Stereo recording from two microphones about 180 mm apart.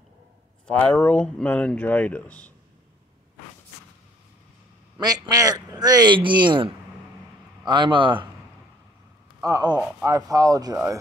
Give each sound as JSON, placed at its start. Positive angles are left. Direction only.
{"t": 0.7, "sound": "speech", "side_deg": 5}
{"t": 4.9, "sound": "speech", "side_deg": -25}
{"t": 9.4, "sound": "speech", "side_deg": -20}